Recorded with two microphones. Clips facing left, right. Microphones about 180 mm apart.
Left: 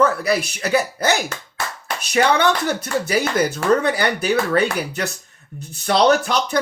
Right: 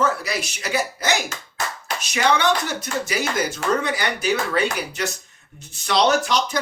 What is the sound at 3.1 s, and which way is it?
Speech, 55° left (ahead or behind).